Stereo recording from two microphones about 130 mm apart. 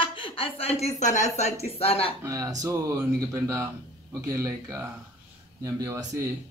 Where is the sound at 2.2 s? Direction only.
25° right (ahead or behind).